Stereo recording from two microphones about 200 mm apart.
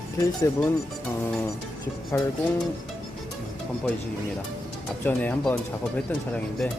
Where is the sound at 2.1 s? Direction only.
10° left (ahead or behind).